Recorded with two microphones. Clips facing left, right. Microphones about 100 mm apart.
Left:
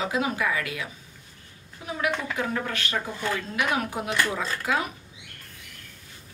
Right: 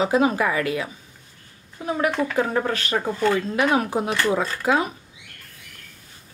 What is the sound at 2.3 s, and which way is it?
Speech, 35° right (ahead or behind).